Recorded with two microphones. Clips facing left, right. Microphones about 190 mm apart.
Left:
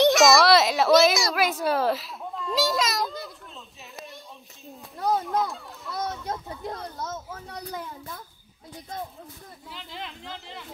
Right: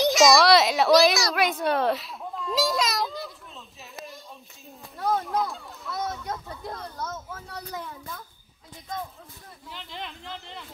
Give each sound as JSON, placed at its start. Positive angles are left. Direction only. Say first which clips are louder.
{"t": 0.0, "sound": "a child's voice", "louder": "left 1 dB", "side_deg": 0}
{"t": 3.9, "sound": "a sound", "louder": "right 1 dB", "side_deg": 0}
{"t": 6.2, "sound": "speech", "louder": "left 2 dB", "side_deg": 25}
{"t": 9.7, "sound": "speech", "louder": "right 1 dB", "side_deg": 0}